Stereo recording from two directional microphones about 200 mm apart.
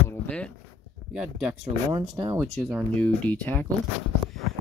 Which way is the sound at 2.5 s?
5° left (ahead or behind).